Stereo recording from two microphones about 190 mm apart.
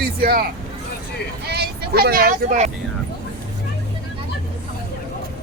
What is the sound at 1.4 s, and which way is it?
Speech, 60° right (ahead or behind).